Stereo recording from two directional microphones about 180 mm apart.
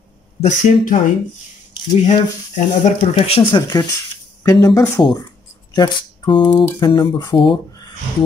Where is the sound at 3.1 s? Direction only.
30° left (ahead or behind).